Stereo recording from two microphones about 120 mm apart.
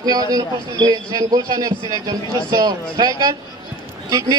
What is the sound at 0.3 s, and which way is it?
A man's voice, 35° right (ahead or behind).